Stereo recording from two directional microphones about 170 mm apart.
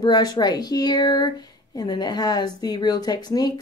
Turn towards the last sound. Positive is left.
turn(degrees=25)  # may be behind; listen again after turning